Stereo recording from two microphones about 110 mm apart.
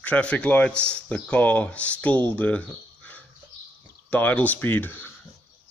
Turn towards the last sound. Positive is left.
turn(degrees=20)  # may be behind; listen again after turning